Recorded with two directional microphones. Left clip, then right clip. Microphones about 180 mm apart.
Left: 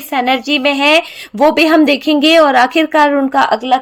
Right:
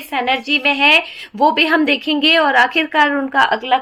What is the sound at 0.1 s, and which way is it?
A woman's voice, 50° left (ahead or behind).